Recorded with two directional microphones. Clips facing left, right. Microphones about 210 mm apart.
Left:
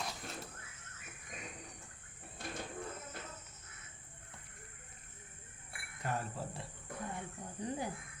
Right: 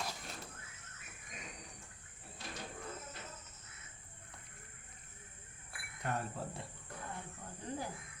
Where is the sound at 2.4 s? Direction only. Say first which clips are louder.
Left 4 dB; 50° left (ahead or behind).